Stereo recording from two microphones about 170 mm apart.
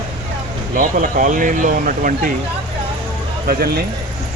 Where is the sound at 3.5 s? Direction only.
65° right (ahead or behind).